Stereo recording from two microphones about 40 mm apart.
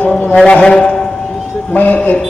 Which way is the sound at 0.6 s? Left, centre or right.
Left.